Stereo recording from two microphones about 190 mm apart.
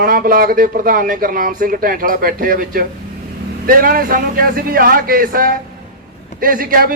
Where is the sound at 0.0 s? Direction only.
50° right (ahead or behind).